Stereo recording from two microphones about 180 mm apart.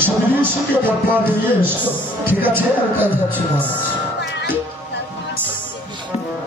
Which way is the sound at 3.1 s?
10° left (ahead or behind).